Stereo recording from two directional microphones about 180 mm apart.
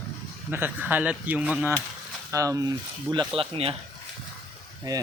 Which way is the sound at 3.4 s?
30° right (ahead or behind).